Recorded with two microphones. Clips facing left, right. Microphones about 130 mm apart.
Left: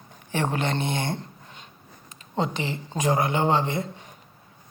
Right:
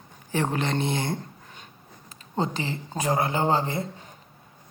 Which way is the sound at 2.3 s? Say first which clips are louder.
Left 1 dB; 35° right (ahead or behind).